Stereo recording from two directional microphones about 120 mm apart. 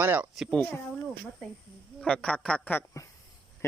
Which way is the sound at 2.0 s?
10° left (ahead or behind).